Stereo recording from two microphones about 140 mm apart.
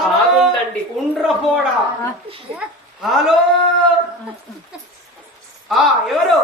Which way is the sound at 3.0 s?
Centre (ahead or behind).